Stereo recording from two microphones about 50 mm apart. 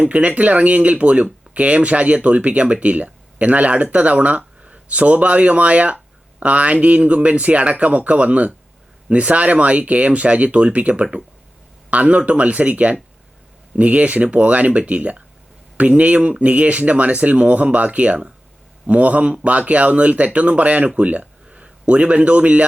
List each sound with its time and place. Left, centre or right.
0.0 s speech: right